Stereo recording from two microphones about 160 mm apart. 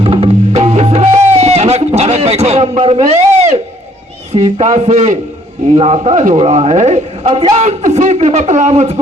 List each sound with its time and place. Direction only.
0.0 s music: 35° right (ahead or behind)
3.1 s a sound: 45° right (ahead or behind)
4.3 s a man's voice: 45° right (ahead or behind)